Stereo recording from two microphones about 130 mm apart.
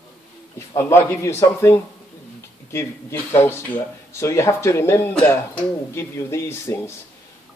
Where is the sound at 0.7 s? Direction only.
20° left (ahead or behind).